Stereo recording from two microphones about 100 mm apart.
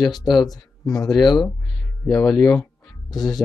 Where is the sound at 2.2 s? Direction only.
5° left (ahead or behind).